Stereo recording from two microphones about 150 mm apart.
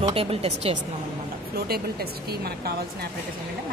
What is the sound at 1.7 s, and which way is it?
Speech, 90° right.